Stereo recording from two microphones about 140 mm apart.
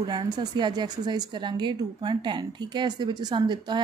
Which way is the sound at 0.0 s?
30° right (ahead or behind).